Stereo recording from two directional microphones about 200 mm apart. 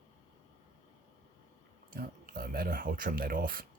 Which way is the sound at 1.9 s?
45° right (ahead or behind).